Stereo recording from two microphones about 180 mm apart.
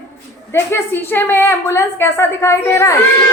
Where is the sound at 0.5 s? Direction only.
15° left (ahead or behind).